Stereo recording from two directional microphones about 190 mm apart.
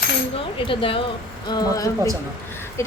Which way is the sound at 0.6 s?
30° left (ahead or behind).